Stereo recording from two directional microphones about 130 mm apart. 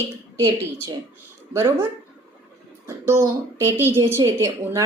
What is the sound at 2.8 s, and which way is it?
Speech, 20° right (ahead or behind).